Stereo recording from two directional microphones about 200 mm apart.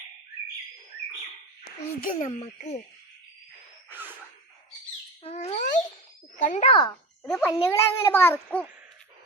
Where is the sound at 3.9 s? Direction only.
10° right (ahead or behind).